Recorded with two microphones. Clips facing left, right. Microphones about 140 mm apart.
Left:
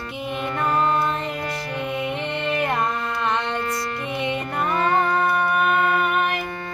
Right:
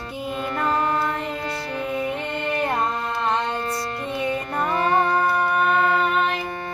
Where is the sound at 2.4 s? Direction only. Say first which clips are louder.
Even; 35° right (ahead or behind).